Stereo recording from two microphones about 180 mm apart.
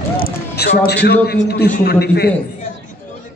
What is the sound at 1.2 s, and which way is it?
A man's voice, 60° left (ahead or behind).